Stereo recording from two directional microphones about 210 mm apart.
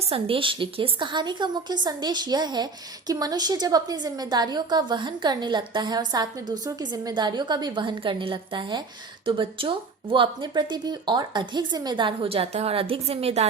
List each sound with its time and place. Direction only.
0.0 s speech: 25° right (ahead or behind)